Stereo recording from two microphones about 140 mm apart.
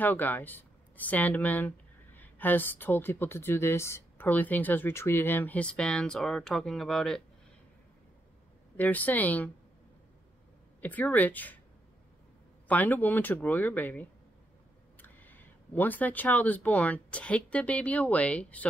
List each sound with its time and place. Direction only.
0.0 s speech: 15° left (ahead or behind)
8.7 s speech: 10° left (ahead or behind)
10.8 s speech: 10° left (ahead or behind)
12.6 s speech: 10° left (ahead or behind)